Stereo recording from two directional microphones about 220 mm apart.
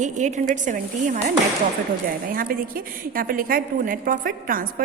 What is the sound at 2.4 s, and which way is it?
A woman's voice, 40° right (ahead or behind).